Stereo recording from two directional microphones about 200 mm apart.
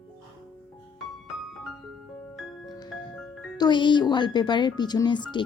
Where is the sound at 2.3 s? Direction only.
Centre (ahead or behind).